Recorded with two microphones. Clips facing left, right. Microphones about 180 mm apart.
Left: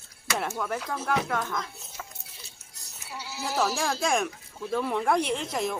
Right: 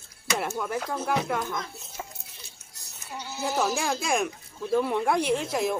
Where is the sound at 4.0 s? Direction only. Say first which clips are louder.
Even; 5° right (ahead or behind).